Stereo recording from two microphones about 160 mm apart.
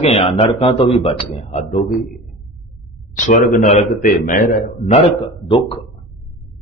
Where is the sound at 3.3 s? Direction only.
50° left (ahead or behind).